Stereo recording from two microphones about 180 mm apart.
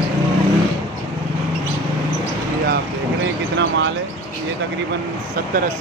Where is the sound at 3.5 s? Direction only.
80° right.